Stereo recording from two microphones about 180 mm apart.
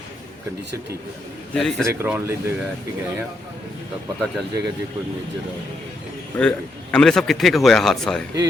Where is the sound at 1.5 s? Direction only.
Centre (ahead or behind).